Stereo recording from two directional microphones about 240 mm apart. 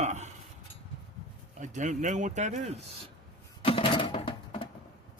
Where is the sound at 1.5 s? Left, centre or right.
Right.